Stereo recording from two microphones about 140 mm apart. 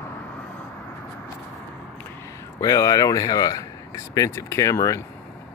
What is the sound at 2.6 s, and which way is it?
Speech, 25° left (ahead or behind).